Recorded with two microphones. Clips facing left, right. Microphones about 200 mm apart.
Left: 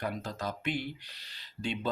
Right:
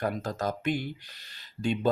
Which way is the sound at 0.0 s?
45° right (ahead or behind).